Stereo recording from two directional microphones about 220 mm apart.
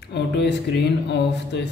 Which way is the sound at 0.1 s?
50° left (ahead or behind).